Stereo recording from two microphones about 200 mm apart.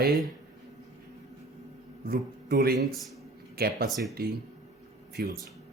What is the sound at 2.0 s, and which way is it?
Speech, 50° right (ahead or behind).